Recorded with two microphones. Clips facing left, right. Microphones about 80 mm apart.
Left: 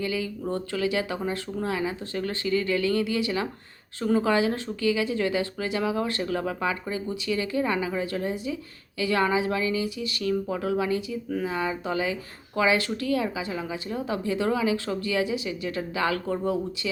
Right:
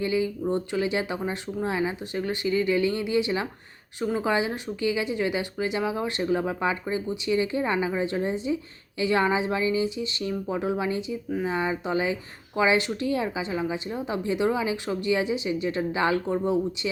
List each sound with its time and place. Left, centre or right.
0.0 s speech: right